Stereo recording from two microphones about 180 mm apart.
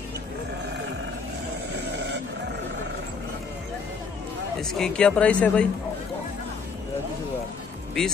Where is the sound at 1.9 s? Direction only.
75° right (ahead or behind).